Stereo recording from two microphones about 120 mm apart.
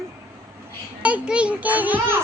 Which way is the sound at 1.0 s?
10° right (ahead or behind).